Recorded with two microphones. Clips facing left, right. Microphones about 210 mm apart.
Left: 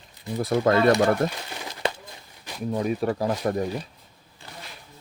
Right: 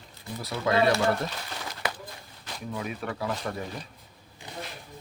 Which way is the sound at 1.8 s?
25° left (ahead or behind).